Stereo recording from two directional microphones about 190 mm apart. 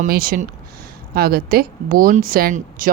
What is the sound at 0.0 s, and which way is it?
Speech, 50° right (ahead or behind).